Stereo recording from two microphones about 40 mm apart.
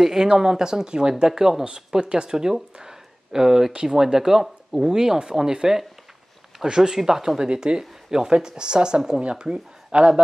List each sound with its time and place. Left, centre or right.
0.0 s speech: centre